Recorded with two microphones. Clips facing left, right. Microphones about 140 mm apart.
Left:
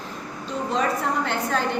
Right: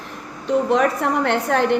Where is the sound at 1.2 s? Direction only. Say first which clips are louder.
Right 6 dB; 70° right (ahead or behind).